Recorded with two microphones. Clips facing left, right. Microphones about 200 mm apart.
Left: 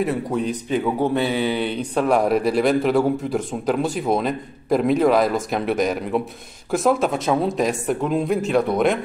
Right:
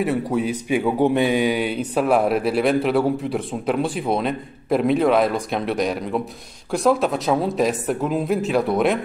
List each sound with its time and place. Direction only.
0.0 s a man's voice: 5° right (ahead or behind)